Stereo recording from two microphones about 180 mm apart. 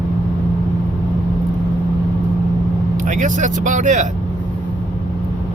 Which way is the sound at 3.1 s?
45° right (ahead or behind).